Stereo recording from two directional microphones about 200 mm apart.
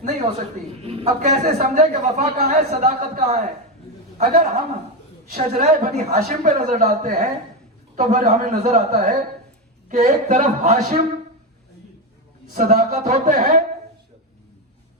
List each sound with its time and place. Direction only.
0.0 s a woman's voice: 30° right (ahead or behind)
4.2 s a man's voice: 50° right (ahead or behind)
6.1 s a man's voice: 45° right (ahead or behind)
6.6 s a man's voice: 35° right (ahead or behind)
12.5 s a man's voice: 40° right (ahead or behind)